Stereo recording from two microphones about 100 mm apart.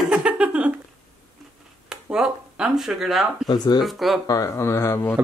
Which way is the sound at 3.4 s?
45° left (ahead or behind).